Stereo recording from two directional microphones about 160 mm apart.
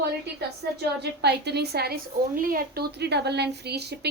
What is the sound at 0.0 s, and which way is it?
A woman's voice, 90° right.